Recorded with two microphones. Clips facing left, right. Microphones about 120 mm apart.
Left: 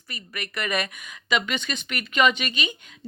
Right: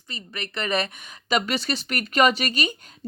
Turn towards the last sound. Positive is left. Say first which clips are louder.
# right 3 dB
turn(degrees=-40)  # may be behind; listen again after turning